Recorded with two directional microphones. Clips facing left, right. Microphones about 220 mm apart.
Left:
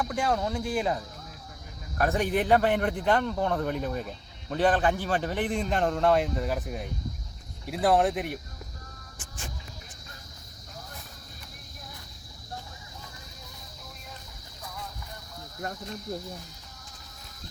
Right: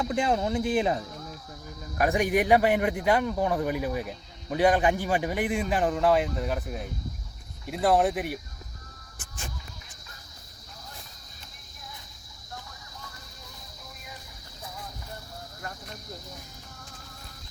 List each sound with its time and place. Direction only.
0.0 s a man's voice: 20° right (ahead or behind); by 8.4 s centre (ahead or behind)